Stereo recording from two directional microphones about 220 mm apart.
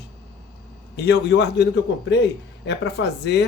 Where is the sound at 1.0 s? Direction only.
50° left (ahead or behind).